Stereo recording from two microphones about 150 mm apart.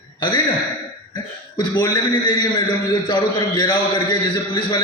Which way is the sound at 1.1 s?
30° left (ahead or behind).